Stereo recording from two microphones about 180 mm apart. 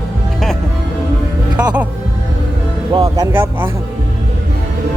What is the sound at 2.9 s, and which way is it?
Speech, 20° right (ahead or behind).